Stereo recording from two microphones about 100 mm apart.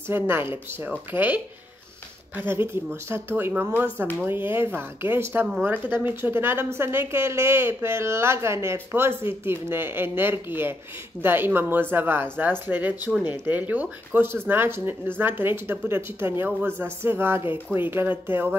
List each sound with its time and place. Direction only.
0.1 s speech: 20° right (ahead or behind)